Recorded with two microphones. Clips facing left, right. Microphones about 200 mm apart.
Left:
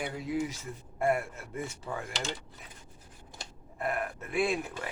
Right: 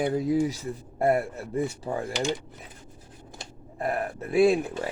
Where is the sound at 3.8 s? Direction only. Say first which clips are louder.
Right 5 dB; 35° right (ahead or behind).